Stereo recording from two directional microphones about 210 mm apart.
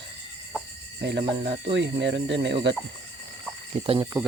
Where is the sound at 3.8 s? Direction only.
25° right (ahead or behind).